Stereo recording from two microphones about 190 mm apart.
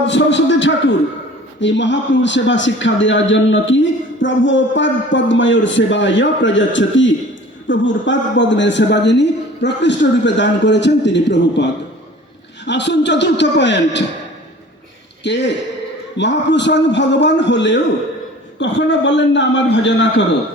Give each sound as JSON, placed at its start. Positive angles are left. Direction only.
{"t": 0.1, "sound": "a man's voice", "side_deg": 70}
{"t": 15.2, "sound": "a man's voice", "side_deg": 65}